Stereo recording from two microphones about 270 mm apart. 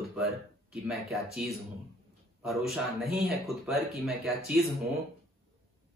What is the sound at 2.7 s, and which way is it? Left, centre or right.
Speech, centre.